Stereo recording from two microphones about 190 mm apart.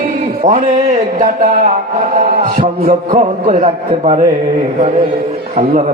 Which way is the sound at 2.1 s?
40° right (ahead or behind).